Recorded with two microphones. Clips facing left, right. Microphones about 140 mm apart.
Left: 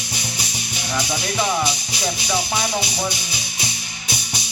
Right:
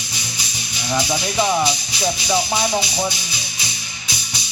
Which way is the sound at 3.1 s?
55° left (ahead or behind).